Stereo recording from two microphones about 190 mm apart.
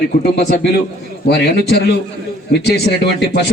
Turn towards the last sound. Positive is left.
turn(degrees=60)  # may be behind; listen again after turning